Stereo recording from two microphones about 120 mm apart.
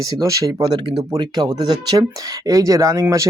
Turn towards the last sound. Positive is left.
turn(degrees=-25)  # may be behind; listen again after turning